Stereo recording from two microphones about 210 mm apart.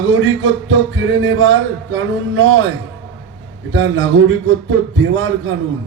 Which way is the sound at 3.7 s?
65° right (ahead or behind).